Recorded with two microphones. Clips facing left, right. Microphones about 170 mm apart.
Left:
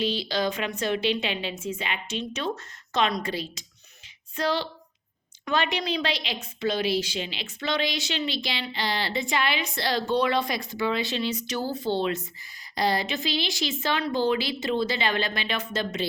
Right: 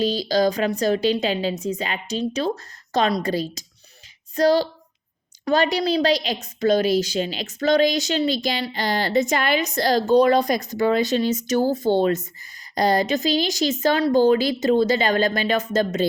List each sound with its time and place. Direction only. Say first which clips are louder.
0.0 s a woman's voice: right 7 dB; 40° right (ahead or behind)